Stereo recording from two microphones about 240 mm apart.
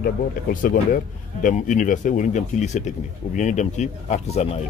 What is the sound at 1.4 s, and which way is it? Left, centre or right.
Speech, left.